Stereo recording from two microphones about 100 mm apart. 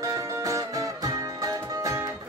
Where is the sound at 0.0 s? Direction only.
35° right (ahead or behind).